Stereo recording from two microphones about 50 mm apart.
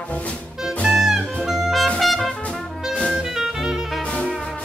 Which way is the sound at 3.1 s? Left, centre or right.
Centre.